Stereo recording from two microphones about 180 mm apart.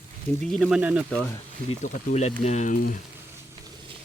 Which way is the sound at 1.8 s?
40° left (ahead or behind).